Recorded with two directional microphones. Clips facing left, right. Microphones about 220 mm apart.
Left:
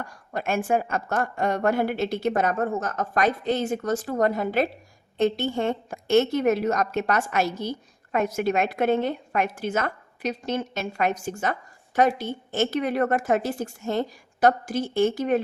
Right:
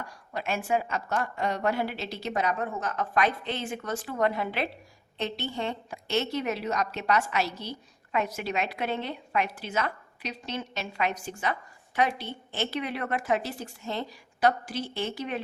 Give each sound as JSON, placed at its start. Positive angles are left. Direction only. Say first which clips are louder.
{"t": 0.0, "sound": "a woman's voice", "louder": "left 4 dB", "side_deg": 50}